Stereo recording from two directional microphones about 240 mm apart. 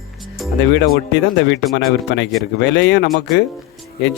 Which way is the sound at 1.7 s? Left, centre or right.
Left.